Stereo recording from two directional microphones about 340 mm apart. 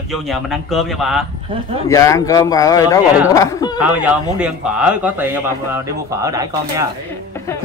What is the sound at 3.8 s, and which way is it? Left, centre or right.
A man's voice, centre.